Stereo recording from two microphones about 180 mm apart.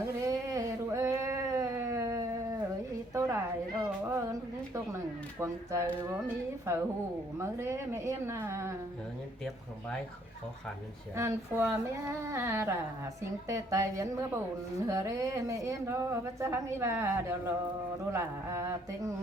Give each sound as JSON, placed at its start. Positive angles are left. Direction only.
{"t": 0.0, "sound": "a sound", "side_deg": -20}
{"t": 5.4, "sound": "a woman's voice", "side_deg": -15}
{"t": 11.2, "sound": "a woman's voice", "side_deg": -15}